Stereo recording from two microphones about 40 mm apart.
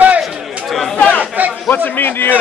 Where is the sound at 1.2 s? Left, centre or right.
Right.